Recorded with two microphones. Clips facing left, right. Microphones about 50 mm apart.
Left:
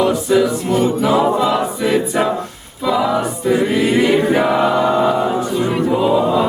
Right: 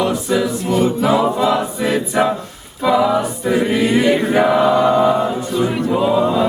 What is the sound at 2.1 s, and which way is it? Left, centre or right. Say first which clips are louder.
Choir: right 5 dB; centre.